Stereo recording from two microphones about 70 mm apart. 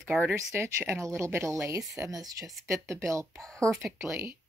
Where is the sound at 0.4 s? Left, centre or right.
Right.